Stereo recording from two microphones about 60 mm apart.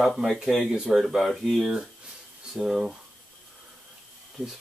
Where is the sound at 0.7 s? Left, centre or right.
Centre.